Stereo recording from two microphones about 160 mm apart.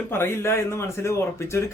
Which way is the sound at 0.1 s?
15° left (ahead or behind).